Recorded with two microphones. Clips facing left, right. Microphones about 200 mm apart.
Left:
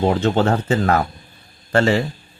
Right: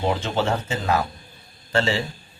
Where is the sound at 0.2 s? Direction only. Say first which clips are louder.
Left 6 dB; 55° left (ahead or behind).